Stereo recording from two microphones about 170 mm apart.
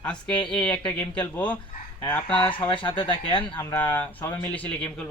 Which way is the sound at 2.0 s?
10° left (ahead or behind).